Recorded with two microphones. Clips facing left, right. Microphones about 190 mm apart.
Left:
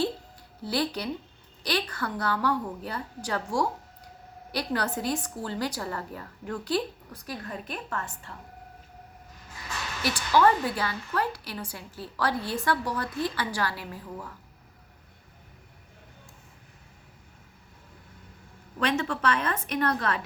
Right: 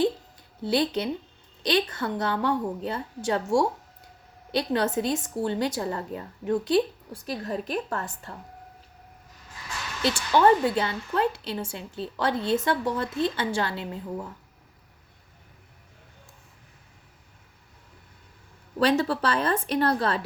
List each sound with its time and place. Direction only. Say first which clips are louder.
0.6 s a woman's voice: right 4 dB; 25° right (ahead or behind)
10.0 s a woman's voice: right 2 dB; 25° right (ahead or behind)
18.8 s a woman's voice: right 5 dB; 35° right (ahead or behind)